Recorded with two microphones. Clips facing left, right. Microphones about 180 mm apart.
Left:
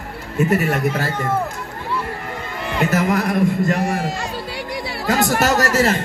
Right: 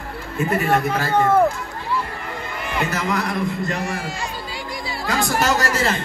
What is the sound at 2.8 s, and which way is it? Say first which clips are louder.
A man's voice: left 5 dB; 40° left (ahead or behind).